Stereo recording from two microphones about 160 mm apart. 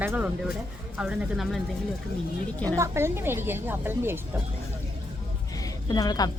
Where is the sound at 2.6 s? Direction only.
20° right (ahead or behind).